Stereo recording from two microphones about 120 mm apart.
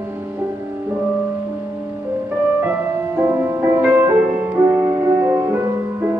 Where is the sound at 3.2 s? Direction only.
20° right (ahead or behind).